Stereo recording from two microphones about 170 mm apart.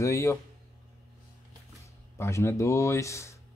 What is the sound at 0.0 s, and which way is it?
Speech, 20° left (ahead or behind).